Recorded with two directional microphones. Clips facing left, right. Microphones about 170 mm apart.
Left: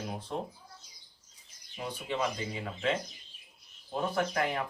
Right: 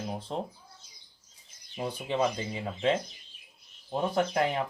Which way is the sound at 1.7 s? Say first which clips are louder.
Right 4 dB; 25° right (ahead or behind).